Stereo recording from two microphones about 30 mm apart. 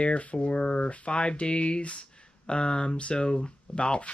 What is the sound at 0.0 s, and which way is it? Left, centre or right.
Speech, left.